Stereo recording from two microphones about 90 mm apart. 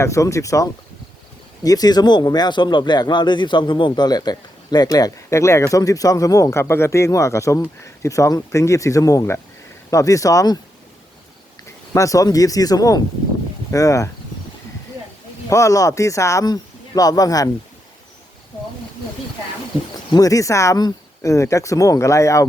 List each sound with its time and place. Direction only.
0.0 s a man's voice: 35° left (ahead or behind)
11.9 s a man's voice: 40° left (ahead or behind)
15.4 s a man's voice: 35° left (ahead or behind)
20.1 s a man's voice: 40° left (ahead or behind)